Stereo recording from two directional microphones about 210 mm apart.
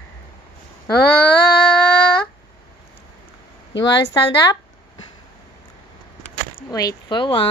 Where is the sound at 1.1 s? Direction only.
10° left (ahead or behind).